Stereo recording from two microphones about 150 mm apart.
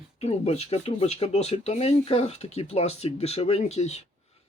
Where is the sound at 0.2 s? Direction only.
45° left (ahead or behind).